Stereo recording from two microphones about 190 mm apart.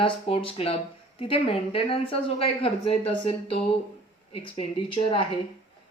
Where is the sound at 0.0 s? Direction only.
30° left (ahead or behind).